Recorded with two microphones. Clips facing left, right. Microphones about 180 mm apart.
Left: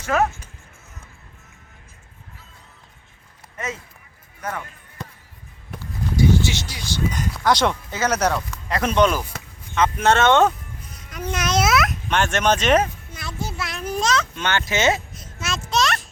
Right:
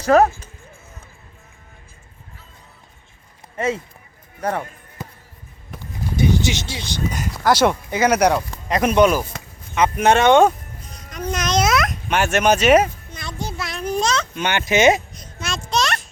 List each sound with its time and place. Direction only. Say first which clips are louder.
0.0 s speech: right 7 dB; 35° right (ahead or behind)
4.4 s speech: right 7 dB; 35° right (ahead or behind)
5.8 s a sound: even; 15° right (ahead or behind)
7.1 s speech: right 3 dB; 5° right (ahead or behind)
11.1 s babbling: right 2 dB; 5° left (ahead or behind)
12.0 s speech: right 6 dB; 10° right (ahead or behind)
13.1 s a sound: right 1 dB; 5° left (ahead or behind)
14.3 s speech: right 4 dB; 15° right (ahead or behind)
15.1 s a sound: even; centre (ahead or behind)